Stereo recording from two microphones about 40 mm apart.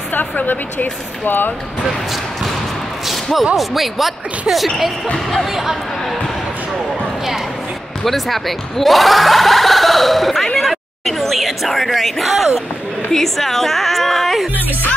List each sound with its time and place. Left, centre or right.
0.1 s speech: left
3.5 s speech: centre
5.1 s speech: centre
5.5 s speech: centre
8.0 s speech: centre
14.5 s speech: right